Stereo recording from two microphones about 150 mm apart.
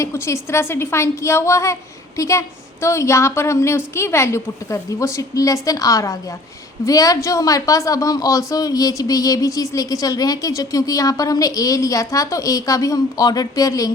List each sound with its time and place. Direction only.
0.0 s a woman's voice: 20° left (ahead or behind)